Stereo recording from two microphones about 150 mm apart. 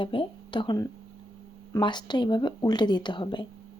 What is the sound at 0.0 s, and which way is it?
Speech, 35° left (ahead or behind).